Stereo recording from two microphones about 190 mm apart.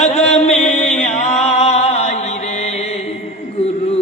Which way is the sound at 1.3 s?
35° left (ahead or behind).